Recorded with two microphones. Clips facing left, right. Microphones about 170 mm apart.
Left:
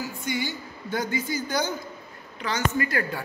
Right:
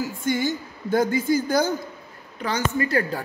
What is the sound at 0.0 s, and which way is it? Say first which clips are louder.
A woman's voice: right 6 dB; 50° right (ahead or behind).